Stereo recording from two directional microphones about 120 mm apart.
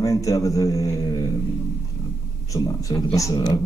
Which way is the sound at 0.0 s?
30° left (ahead or behind).